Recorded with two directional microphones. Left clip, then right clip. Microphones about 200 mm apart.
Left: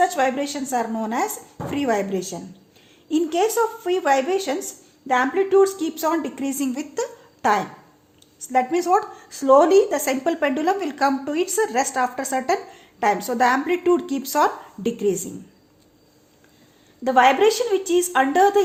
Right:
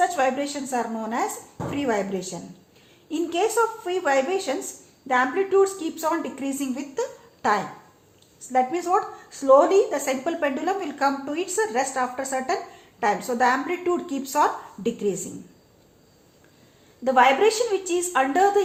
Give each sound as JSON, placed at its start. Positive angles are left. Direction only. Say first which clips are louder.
{"t": 0.0, "sound": "a woman's voice", "louder": "left 2 dB", "side_deg": 35}
{"t": 17.0, "sound": "a woman's voice", "louder": "left 2 dB", "side_deg": 35}